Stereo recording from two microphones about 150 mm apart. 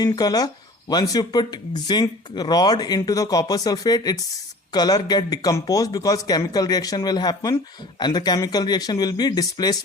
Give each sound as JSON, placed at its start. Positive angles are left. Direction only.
{"t": 0.0, "sound": "a man's voice", "side_deg": 25}